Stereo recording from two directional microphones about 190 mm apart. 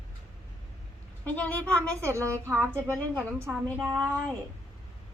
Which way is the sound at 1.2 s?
10° left (ahead or behind).